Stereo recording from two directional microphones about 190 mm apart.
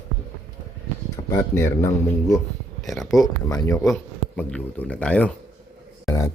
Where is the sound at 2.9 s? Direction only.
Centre (ahead or behind).